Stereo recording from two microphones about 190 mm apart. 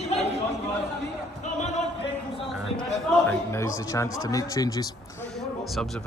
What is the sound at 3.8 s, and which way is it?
Speech, 15° left (ahead or behind).